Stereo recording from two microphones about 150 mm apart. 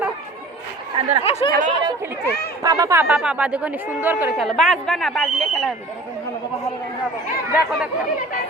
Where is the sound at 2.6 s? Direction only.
20° right (ahead or behind).